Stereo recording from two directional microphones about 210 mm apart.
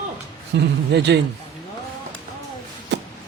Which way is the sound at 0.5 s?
55° right (ahead or behind).